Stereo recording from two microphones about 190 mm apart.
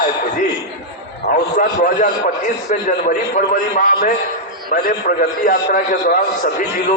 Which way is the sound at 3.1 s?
40° left (ahead or behind).